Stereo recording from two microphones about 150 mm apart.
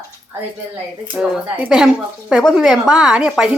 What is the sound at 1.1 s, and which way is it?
A woman's voice, 10° right (ahead or behind).